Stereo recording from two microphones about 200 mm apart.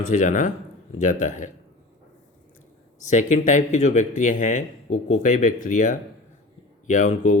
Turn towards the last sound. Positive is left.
turn(degrees=40)  # may be behind; listen again after turning